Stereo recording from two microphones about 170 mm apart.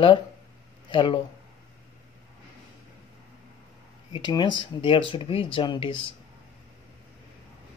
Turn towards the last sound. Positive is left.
turn(degrees=30)  # may be behind; listen again after turning